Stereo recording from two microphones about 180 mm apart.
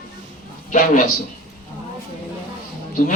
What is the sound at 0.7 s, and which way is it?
Speech, 45° left (ahead or behind).